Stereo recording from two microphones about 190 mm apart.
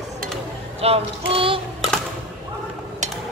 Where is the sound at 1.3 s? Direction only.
30° right (ahead or behind).